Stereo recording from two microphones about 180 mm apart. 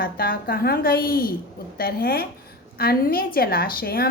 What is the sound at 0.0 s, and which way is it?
A woman's voice, 55° left (ahead or behind).